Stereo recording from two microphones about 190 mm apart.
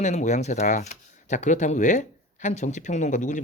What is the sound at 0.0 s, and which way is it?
Speech, 40° left (ahead or behind).